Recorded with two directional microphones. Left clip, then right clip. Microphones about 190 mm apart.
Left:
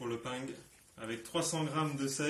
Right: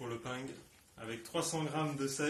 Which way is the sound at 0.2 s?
15° right (ahead or behind).